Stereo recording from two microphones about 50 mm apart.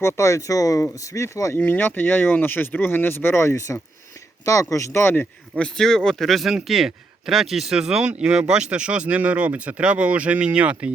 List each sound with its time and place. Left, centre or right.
0.0 s speech: left
1.5 s speech: left
4.9 s a man's voice: left
5.5 s speech: centre; by 10.9 s right